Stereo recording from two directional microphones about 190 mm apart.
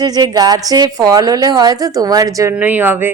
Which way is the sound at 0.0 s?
20° right (ahead or behind).